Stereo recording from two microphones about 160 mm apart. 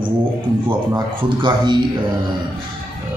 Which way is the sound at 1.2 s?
30° right (ahead or behind).